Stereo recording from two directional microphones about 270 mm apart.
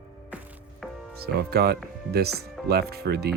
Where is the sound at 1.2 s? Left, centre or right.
Right.